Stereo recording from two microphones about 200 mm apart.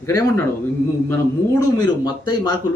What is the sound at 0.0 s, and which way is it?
A man's voice, 15° left (ahead or behind).